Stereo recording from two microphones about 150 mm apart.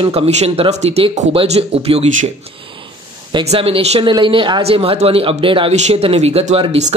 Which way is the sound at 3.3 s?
40° right (ahead or behind).